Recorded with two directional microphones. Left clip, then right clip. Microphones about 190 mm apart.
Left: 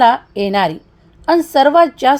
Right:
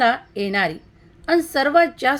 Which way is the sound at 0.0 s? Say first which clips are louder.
Left 7 dB; 15° left (ahead or behind).